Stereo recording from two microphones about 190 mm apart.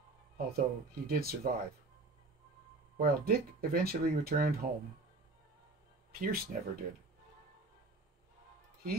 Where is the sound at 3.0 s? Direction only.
50° right (ahead or behind).